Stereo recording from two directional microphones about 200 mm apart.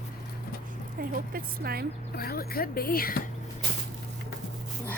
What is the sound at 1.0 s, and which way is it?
Speech, 50° right (ahead or behind).